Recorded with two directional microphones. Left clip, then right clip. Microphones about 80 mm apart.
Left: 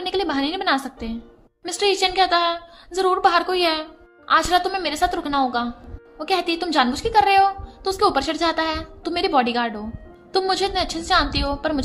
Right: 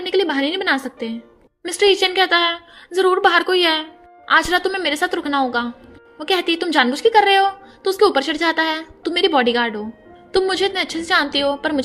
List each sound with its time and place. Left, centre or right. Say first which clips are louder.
0.0 s a woman's voice: right 4 dB; right